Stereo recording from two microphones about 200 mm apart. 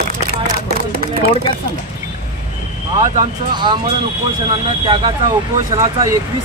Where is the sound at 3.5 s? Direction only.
20° right (ahead or behind).